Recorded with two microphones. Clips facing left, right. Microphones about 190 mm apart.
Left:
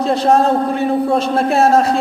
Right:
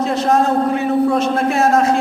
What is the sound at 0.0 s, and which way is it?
A man's voice, 30° left (ahead or behind).